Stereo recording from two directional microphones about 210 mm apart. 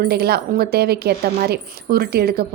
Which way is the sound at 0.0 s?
50° right (ahead or behind).